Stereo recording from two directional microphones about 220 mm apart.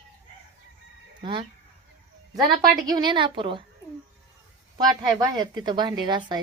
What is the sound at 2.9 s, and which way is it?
Speech, 20° right (ahead or behind).